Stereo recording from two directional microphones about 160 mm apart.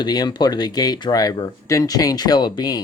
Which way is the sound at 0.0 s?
25° left (ahead or behind).